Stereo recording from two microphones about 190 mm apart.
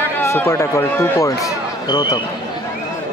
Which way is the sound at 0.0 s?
10° left (ahead or behind).